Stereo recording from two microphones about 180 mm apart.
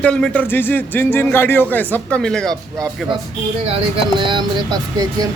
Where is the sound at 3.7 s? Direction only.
30° right (ahead or behind).